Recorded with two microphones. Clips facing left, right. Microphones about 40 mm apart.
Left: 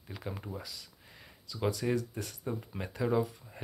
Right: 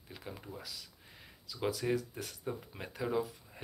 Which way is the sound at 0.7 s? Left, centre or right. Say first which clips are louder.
Even; centre.